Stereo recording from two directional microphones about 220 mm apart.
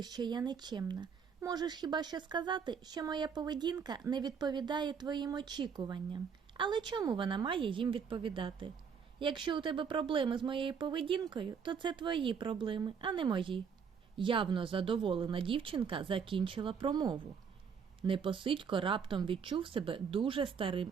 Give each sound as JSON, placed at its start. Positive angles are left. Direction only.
{"t": 0.0, "sound": "speech", "side_deg": -20}